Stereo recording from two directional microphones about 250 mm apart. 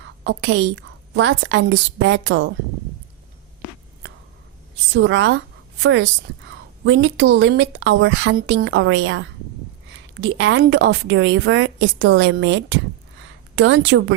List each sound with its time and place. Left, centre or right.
0.3 s a woman's voice: right
4.9 s a woman's voice: right